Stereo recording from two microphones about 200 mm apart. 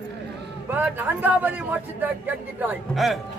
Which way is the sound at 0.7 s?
10° right (ahead or behind).